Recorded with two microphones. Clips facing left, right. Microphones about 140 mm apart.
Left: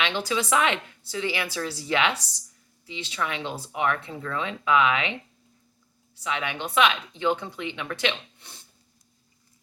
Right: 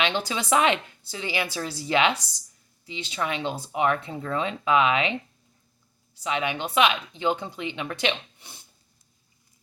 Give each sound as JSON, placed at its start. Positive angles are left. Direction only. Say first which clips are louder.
{"t": 0.0, "sound": "speech", "louder": "even", "side_deg": -20}
{"t": 6.2, "sound": "speech", "louder": "right 3 dB", "side_deg": -20}
{"t": 8.4, "sound": "a sound", "louder": "right 1 dB", "side_deg": -15}